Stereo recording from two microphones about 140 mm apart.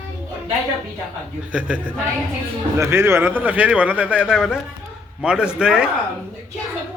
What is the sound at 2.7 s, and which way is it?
A man's voice, 20° right (ahead or behind).